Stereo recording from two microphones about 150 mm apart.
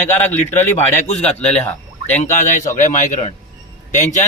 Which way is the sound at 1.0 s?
45° left (ahead or behind).